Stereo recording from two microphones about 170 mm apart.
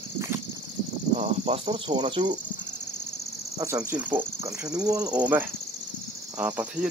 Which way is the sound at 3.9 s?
10° right (ahead or behind).